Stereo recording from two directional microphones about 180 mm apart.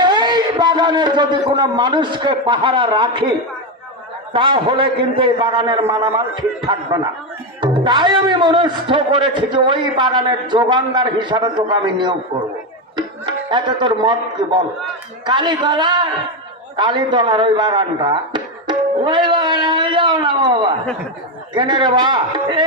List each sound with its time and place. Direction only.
0.0 s a man's voice: 25° right (ahead or behind)
4.3 s a man's voice: 25° right (ahead or behind)
13.5 s a man's voice: 25° right (ahead or behind)